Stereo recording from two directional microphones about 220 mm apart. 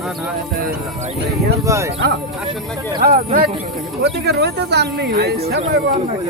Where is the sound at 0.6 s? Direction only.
40° right (ahead or behind).